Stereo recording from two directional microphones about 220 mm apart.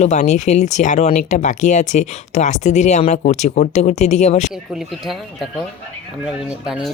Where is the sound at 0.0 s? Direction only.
30° left (ahead or behind).